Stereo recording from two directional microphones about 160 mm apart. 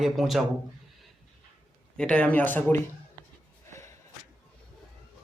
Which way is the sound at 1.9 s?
5° left (ahead or behind).